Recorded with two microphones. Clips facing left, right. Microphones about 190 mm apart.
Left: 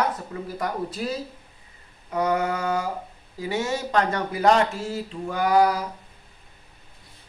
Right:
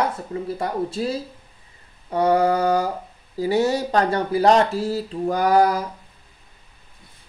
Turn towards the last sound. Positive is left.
turn(degrees=-40)  # may be behind; listen again after turning